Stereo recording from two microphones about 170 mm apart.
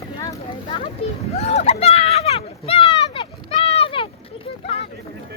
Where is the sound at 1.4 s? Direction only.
40° left (ahead or behind).